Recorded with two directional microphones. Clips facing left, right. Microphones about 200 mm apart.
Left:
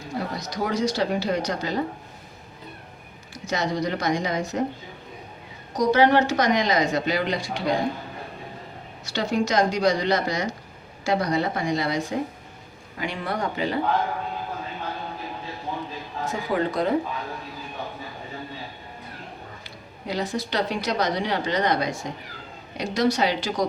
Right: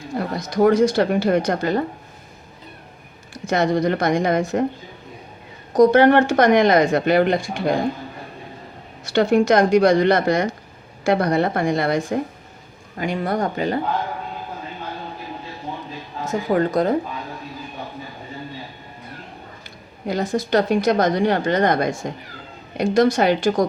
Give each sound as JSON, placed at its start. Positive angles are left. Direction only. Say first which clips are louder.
{"t": 0.3, "sound": "a woman's voice", "louder": "right 13 dB", "side_deg": -50}
{"t": 3.3, "sound": "speech", "louder": "right 7 dB", "side_deg": -55}
{"t": 5.7, "sound": "speech", "louder": "right 6 dB", "side_deg": -55}
{"t": 9.0, "sound": "a woman's voice", "louder": "right 9 dB", "side_deg": -55}
{"t": 16.3, "sound": "a woman's voice", "louder": "right 7 dB", "side_deg": -45}
{"t": 20.1, "sound": "a woman's voice", "louder": "right 6 dB", "side_deg": -50}